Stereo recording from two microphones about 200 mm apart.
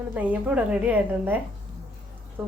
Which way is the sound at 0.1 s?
10° right (ahead or behind).